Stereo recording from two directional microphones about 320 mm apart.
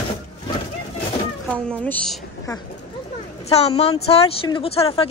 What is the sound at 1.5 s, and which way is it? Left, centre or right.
A woman's voice, centre.